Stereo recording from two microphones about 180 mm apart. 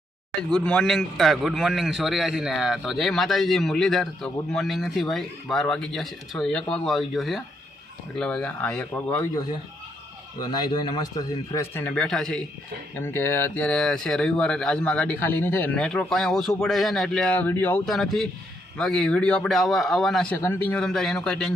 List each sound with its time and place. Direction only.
0.5 s a man's voice: 5° left (ahead or behind)
10.4 s speech: 25° left (ahead or behind)
11.5 s speech: 15° left (ahead or behind)
13.0 s a man's voice: 15° left (ahead or behind)